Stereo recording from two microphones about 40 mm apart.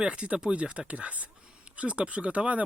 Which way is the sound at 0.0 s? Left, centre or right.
Right.